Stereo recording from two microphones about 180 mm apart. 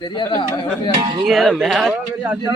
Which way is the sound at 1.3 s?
Centre (ahead or behind).